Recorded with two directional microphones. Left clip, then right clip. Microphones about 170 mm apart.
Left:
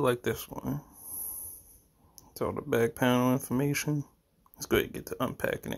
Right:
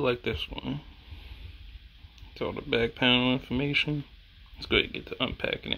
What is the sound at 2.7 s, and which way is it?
Speech, 25° left (ahead or behind).